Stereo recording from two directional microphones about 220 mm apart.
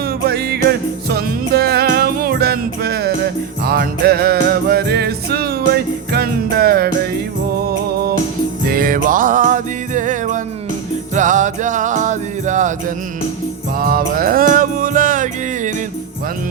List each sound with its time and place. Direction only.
0.0 s music: 45° right (ahead or behind)
8.7 s music: 40° right (ahead or behind)
13.7 s music: 40° right (ahead or behind)